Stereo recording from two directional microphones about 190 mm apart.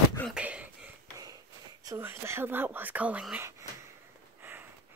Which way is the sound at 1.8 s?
15° right (ahead or behind).